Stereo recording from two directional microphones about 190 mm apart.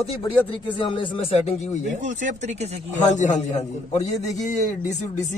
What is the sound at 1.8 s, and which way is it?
Speech, 40° right (ahead or behind).